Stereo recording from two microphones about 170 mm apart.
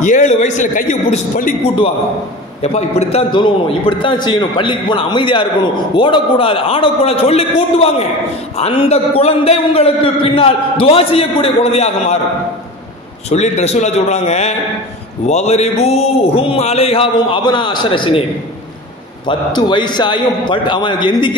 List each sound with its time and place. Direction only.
0.0 s a man's voice: 45° left (ahead or behind)
2.6 s a man's voice: 40° left (ahead or behind)
13.3 s a man's voice: 40° left (ahead or behind)
19.2 s a man's voice: 25° left (ahead or behind)